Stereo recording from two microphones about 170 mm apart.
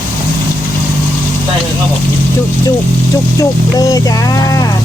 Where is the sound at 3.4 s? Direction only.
20° left (ahead or behind).